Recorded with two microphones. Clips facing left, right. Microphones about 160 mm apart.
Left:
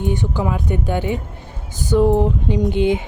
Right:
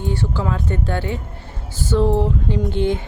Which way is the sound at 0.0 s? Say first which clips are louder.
Left 2 dB; 20° left (ahead or behind).